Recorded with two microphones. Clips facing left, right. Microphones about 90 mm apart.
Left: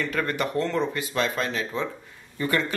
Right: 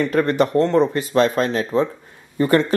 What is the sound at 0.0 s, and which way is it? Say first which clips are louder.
Speech: right 9 dB; 30° right (ahead or behind).